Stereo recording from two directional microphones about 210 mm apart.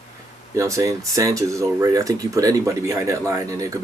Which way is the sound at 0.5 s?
15° right (ahead or behind).